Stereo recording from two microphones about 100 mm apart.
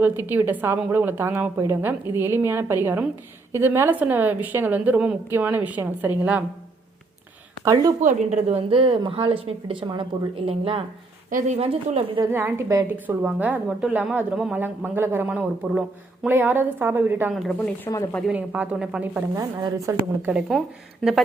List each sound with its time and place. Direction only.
0.0 s a woman's voice: 20° right (ahead or behind)
7.6 s a woman's voice: 35° right (ahead or behind)
8.4 s a woman's voice: 85° right; by 10.8 s 65° right (ahead or behind)
11.5 s speech: 80° right
12.3 s a woman's voice: 25° right (ahead or behind)
12.9 s a woman's voice: 20° right (ahead or behind)
17.3 s speech: centre (ahead or behind)
17.8 s speech: 35° left (ahead or behind)
18.3 s a woman's voice: 15° right (ahead or behind)
19.4 s a woman's voice: 40° right (ahead or behind)
20.3 s a woman's voice: 20° right (ahead or behind)